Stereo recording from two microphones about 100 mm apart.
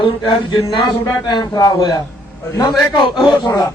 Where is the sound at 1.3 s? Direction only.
45° left (ahead or behind).